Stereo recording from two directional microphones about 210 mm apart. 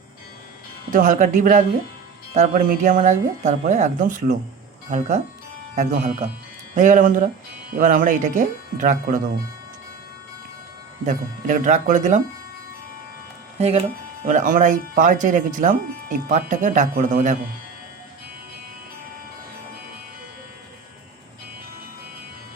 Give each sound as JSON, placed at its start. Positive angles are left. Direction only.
{"t": 0.9, "sound": "speech", "side_deg": -40}
{"t": 11.0, "sound": "speech", "side_deg": -35}
{"t": 13.6, "sound": "speech", "side_deg": -30}